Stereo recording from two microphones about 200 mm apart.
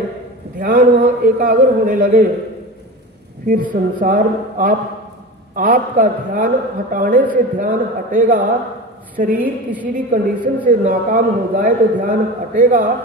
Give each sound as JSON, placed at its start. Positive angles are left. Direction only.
{"t": 0.6, "sound": "a man's voice", "side_deg": -40}
{"t": 3.7, "sound": "a man's voice", "side_deg": -40}
{"t": 9.3, "sound": "a woman's voice", "side_deg": -10}
{"t": 9.9, "sound": "a man's voice", "side_deg": -40}